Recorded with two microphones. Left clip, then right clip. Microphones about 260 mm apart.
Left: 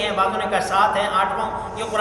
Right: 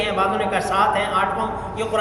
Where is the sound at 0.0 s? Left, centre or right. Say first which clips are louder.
Even; centre.